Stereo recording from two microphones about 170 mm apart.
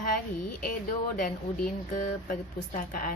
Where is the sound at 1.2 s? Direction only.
50° left (ahead or behind).